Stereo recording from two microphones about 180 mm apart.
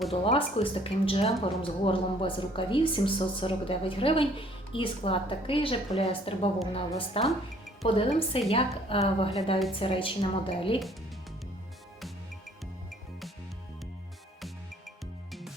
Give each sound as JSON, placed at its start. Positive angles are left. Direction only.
{"t": 0.1, "sound": "a woman's voice", "side_deg": 30}
{"t": 15.3, "sound": "music", "side_deg": 0}